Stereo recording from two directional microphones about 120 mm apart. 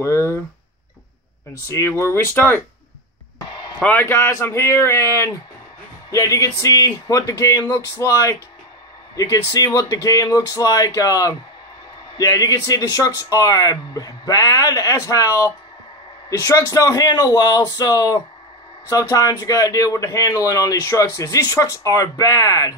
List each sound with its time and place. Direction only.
0.0 s speech: 25° left (ahead or behind)
1.7 s speech: 25° left (ahead or behind)
4.0 s speech: 20° left (ahead or behind)